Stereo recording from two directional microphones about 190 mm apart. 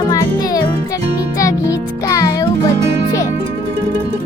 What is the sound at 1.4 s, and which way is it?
Music, 15° left (ahead or behind).